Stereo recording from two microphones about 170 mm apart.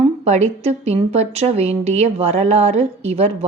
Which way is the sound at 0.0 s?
40° right (ahead or behind).